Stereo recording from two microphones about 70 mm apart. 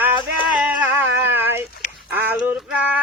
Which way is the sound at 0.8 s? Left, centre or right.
Right.